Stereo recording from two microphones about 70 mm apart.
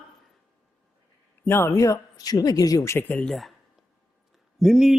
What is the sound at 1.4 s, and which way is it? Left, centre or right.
Speech, left.